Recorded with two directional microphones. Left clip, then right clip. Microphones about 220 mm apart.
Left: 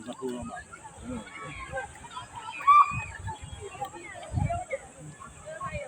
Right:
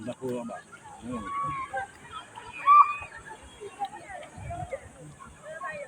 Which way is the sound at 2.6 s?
50° left (ahead or behind).